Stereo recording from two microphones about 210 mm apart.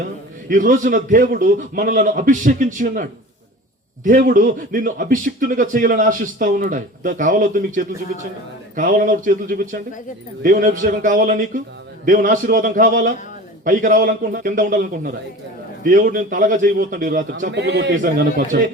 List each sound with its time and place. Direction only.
0.4 s speech: 40° right (ahead or behind)
17.5 s a man's voice: 55° right (ahead or behind)
18.0 s speech: 40° right (ahead or behind)